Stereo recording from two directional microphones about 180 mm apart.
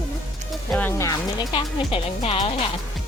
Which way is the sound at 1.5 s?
30° left (ahead or behind).